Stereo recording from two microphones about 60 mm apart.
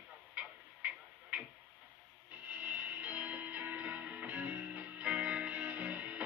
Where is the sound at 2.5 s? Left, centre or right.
Right.